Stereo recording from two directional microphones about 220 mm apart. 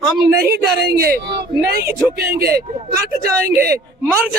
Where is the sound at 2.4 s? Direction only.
45° right (ahead or behind).